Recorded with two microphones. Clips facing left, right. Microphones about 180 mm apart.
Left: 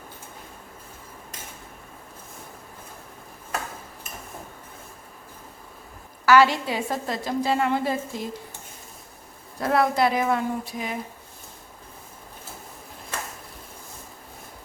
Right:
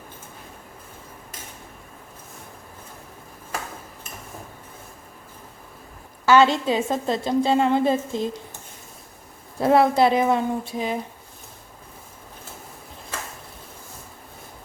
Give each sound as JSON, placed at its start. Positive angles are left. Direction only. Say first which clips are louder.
{"t": 6.2, "sound": "a woman's voice", "louder": "right 1 dB", "side_deg": -25}
{"t": 9.6, "sound": "a woman's voice", "louder": "right 5 dB", "side_deg": -25}